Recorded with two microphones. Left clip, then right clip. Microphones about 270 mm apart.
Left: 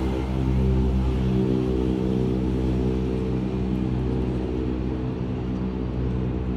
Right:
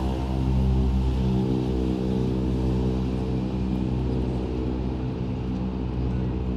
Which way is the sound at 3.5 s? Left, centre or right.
Centre.